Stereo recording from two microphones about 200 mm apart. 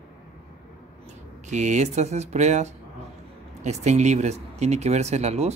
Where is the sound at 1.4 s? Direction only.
35° right (ahead or behind).